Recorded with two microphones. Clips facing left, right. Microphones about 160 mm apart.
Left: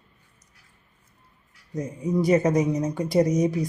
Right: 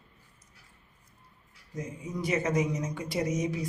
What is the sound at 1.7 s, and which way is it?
Speech, 40° left (ahead or behind).